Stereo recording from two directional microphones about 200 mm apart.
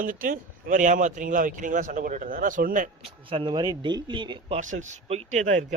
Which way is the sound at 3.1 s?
25° right (ahead or behind).